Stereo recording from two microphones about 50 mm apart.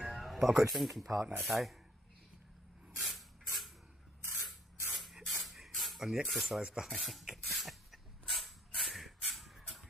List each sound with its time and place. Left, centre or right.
0.0 s speech: centre
3.0 s spray: centre
6.2 s speech: centre
6.6 s rub: centre
6.9 s a sound: centre